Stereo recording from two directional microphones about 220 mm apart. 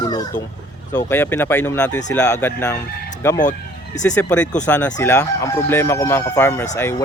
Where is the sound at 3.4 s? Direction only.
35° left (ahead or behind).